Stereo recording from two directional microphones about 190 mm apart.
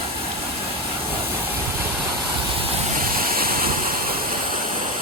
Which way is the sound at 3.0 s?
50° right (ahead or behind).